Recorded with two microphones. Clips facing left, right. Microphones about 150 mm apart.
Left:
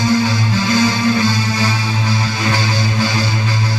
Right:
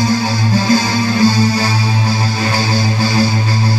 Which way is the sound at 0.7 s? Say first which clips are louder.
Left 2 dB; 35° right (ahead or behind).